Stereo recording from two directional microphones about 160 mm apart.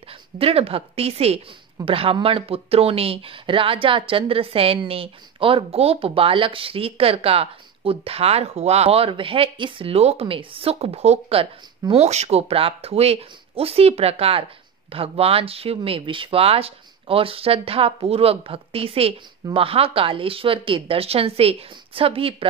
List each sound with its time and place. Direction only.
0.4 s speech: 35° right (ahead or behind)